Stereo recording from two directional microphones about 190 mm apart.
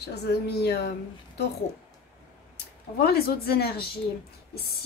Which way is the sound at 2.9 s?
55° left (ahead or behind).